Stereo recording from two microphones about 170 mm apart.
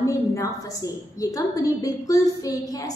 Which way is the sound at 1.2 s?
20° left (ahead or behind).